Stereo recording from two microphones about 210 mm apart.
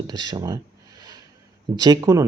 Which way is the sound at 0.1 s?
20° right (ahead or behind).